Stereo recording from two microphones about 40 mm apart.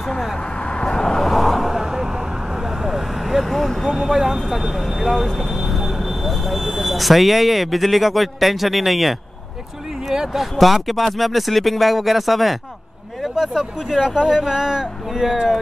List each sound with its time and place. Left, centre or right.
0.4 s vehicle: left
1.3 s vehicle: centre
4.5 s speech: centre
10.6 s speech: centre